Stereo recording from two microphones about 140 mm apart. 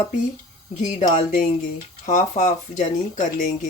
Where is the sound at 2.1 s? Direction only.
60° left (ahead or behind).